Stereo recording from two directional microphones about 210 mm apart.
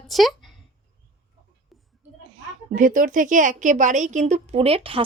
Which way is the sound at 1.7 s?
Centre (ahead or behind).